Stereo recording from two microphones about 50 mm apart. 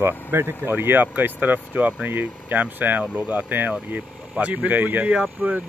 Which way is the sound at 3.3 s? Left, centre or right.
Right.